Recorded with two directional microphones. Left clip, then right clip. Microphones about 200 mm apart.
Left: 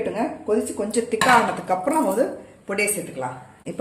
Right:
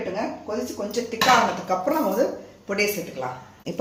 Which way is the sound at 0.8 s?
50° left (ahead or behind).